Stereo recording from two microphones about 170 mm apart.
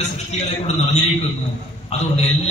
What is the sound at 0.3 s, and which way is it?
A man's voice, 40° left (ahead or behind).